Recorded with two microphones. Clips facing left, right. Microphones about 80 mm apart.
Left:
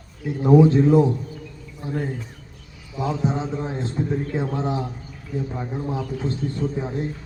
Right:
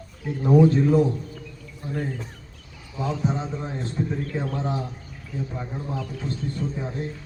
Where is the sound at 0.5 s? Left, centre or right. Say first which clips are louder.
Left 3 dB; centre.